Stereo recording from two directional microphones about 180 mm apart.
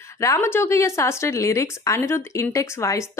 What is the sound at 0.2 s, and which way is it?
A woman's voice, 15° left (ahead or behind).